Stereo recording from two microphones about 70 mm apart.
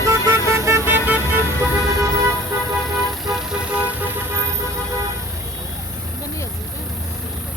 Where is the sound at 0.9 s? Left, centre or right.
Right.